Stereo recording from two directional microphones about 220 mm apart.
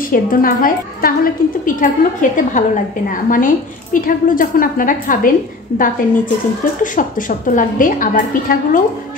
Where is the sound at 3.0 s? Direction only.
40° left (ahead or behind).